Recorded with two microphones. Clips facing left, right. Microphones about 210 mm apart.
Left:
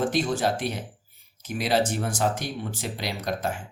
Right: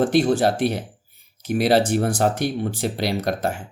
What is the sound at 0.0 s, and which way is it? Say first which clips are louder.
Speech: right 7 dB; 65° right (ahead or behind).